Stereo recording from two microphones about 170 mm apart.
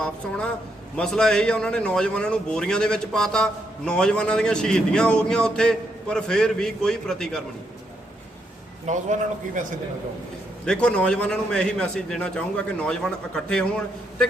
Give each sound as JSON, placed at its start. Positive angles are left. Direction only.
{"t": 0.0, "sound": "a man's voice", "side_deg": 5}
{"t": 8.9, "sound": "a man's voice", "side_deg": -45}
{"t": 10.7, "sound": "a man's voice", "side_deg": 5}